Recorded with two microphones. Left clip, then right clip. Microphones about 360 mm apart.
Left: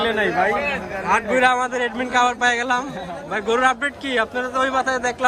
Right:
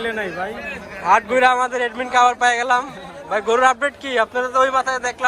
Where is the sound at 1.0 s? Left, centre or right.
Centre.